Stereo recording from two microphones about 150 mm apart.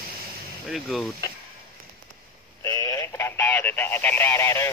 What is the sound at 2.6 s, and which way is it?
Radio, 15° left (ahead or behind).